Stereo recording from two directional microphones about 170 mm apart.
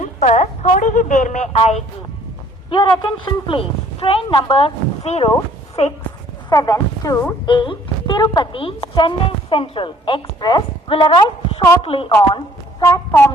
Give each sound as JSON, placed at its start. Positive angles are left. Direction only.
{"t": 0.0, "sound": "a woman's voice", "side_deg": 45}
{"t": 2.6, "sound": "speech", "side_deg": 30}
{"t": 6.5, "sound": "a woman's voice", "side_deg": 20}
{"t": 12.8, "sound": "a woman's voice", "side_deg": 20}